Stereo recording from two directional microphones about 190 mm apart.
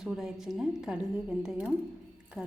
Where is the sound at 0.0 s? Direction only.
5° right (ahead or behind).